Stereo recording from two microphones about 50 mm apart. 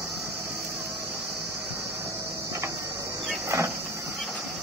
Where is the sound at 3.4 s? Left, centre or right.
Right.